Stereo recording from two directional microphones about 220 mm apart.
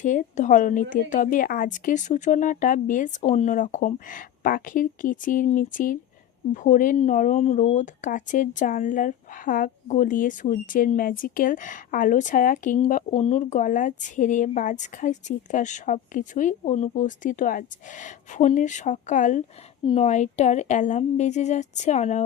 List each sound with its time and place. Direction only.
0.0 s speech: 35° left (ahead or behind)